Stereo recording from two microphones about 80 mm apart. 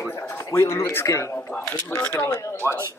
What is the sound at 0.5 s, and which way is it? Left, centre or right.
Speech, left.